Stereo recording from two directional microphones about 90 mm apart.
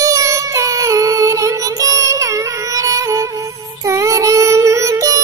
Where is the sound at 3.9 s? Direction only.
35° right (ahead or behind).